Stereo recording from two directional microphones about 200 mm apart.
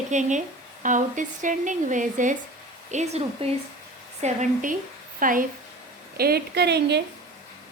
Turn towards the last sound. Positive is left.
turn(degrees=-55)  # may be behind; listen again after turning